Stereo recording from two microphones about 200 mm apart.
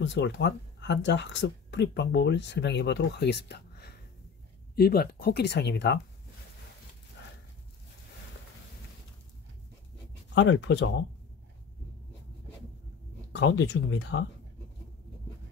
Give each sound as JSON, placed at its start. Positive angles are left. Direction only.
{"t": 0.0, "sound": "speech", "side_deg": 65}
{"t": 10.3, "sound": "speech", "side_deg": 60}
{"t": 13.3, "sound": "speech", "side_deg": 60}